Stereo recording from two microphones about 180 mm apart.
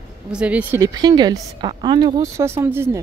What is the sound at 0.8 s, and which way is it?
Speech, 20° right (ahead or behind).